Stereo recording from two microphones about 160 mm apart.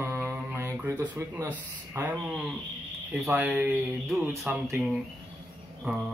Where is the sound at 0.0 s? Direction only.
15° right (ahead or behind).